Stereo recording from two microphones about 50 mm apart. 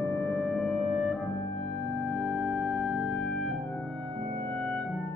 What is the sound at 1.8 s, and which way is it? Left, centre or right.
Music, left.